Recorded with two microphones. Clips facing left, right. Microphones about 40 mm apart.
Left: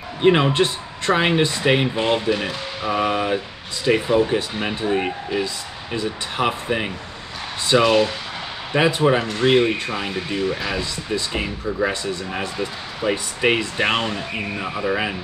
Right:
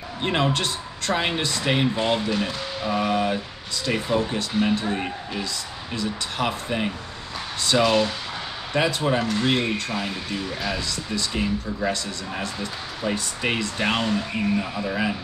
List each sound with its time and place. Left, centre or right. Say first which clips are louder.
0.2 s speech: left 7 dB; left